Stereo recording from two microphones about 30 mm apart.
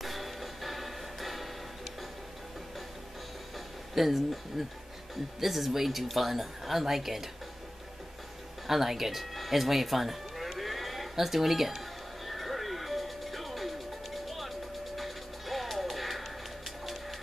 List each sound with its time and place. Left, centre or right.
0.0 s music: centre
3.5 s a woman's voice: centre
8.6 s speech: centre
10.6 s a sound: centre
12.3 s music: centre